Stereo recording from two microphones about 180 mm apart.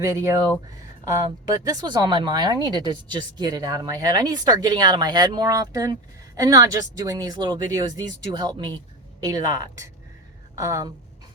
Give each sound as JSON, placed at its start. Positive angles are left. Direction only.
{"t": 0.0, "sound": "speech", "side_deg": -15}